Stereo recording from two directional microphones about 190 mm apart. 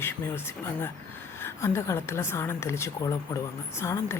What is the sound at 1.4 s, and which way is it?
Speech, 15° left (ahead or behind).